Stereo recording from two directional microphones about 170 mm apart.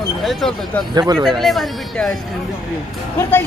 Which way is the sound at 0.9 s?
25° right (ahead or behind).